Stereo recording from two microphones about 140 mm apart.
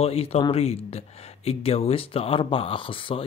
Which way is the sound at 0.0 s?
45° left (ahead or behind).